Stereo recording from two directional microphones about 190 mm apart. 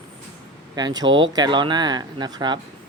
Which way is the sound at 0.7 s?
20° right (ahead or behind).